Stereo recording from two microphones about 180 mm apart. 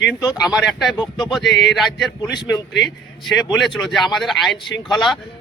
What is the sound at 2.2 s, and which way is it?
Speech, 20° left (ahead or behind).